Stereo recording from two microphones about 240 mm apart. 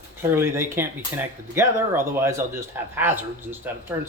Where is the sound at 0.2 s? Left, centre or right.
Centre.